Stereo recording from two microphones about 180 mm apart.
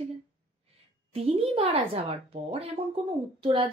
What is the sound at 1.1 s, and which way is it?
A woman's voice, 30° right (ahead or behind).